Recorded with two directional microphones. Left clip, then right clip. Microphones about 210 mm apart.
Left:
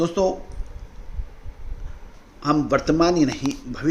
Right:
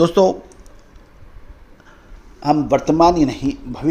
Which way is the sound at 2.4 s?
15° right (ahead or behind).